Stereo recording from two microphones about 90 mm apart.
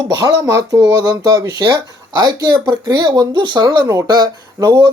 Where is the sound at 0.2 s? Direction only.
45° right (ahead or behind).